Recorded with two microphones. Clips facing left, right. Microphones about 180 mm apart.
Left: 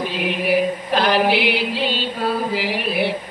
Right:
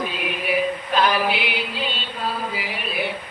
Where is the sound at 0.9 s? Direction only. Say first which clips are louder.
Left 4 dB; 75° left (ahead or behind).